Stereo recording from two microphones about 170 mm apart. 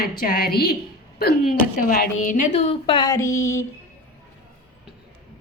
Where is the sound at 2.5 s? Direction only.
35° left (ahead or behind); by 3.6 s 15° left (ahead or behind).